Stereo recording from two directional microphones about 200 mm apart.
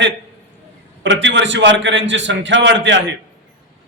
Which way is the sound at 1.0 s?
65° right (ahead or behind).